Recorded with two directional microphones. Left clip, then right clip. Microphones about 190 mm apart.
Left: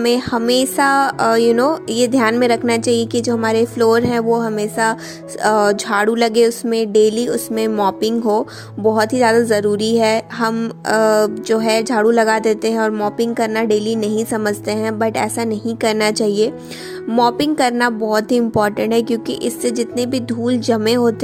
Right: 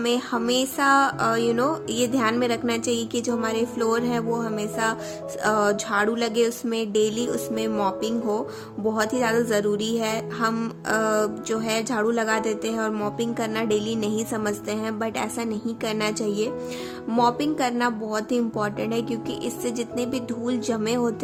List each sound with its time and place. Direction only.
0.0 s a woman's voice: 35° left (ahead or behind)